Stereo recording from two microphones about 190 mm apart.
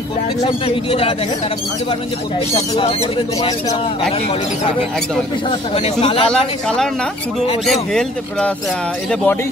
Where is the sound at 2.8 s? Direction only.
30° left (ahead or behind).